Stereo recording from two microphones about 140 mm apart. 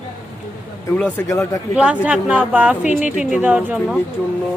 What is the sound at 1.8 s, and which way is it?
Speech, 10° right (ahead or behind).